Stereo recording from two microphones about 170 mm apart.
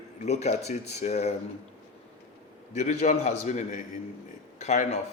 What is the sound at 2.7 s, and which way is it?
A man's voice, 45° left (ahead or behind).